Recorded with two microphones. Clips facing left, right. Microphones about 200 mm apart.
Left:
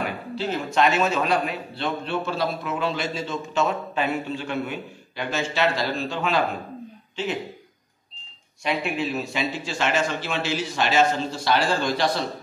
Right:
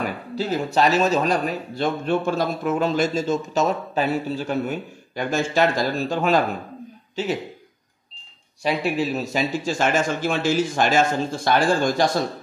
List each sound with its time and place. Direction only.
0.4 s a man's voice: 35° right (ahead or behind)
8.6 s a man's voice: 40° right (ahead or behind)